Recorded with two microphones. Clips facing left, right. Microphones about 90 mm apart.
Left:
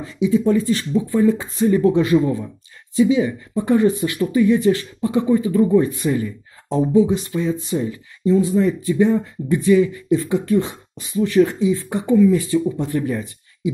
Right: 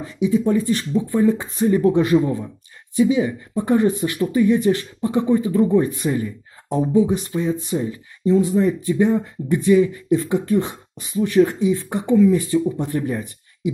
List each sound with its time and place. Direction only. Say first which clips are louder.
0.0 s speech: left 1 dB; 20° right (ahead or behind)